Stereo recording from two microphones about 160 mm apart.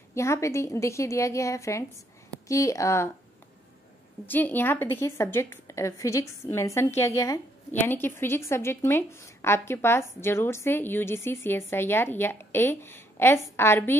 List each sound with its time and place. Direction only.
0.1 s a woman's voice: 15° left (ahead or behind)
4.3 s a woman's voice: 10° left (ahead or behind)